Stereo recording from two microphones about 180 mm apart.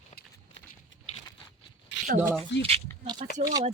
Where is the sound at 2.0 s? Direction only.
45° right (ahead or behind).